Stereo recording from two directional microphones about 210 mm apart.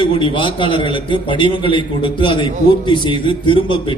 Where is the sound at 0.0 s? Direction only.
25° left (ahead or behind).